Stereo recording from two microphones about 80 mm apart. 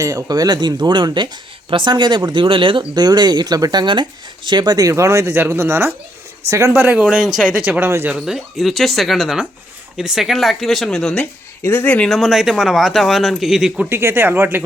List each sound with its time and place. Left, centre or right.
0.0 s speech: right
5.2 s speech: right
6.5 s speech: right
6.7 s speech: right
7.0 s speech: centre
7.9 s speech: right
8.1 s speech: centre
11.6 s speech: left
12.0 s speech: centre
13.9 s speech: right